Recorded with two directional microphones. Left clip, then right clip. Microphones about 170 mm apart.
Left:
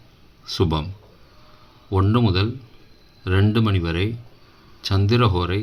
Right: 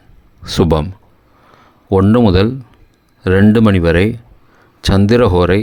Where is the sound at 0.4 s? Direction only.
60° right (ahead or behind).